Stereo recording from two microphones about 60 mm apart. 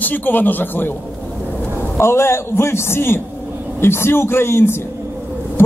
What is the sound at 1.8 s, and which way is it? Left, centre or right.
A man's voice, left.